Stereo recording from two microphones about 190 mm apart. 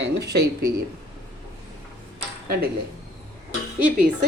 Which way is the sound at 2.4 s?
55° right (ahead or behind).